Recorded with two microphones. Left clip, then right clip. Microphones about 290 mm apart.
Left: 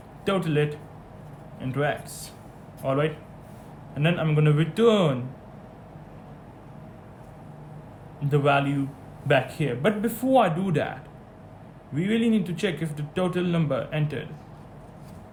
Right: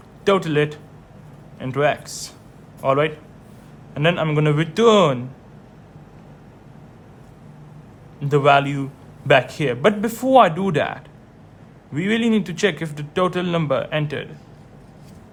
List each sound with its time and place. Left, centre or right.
0.3 s speech: centre
8.3 s speech: right
11.9 s speech: right